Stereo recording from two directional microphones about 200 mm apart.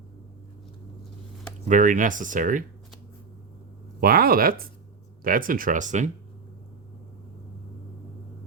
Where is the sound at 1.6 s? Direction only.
40° right (ahead or behind).